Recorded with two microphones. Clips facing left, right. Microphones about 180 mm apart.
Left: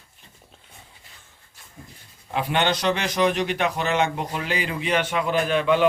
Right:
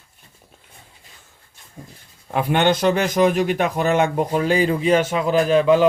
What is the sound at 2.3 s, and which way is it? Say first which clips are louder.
A man's voice: right 5 dB; 50° right (ahead or behind).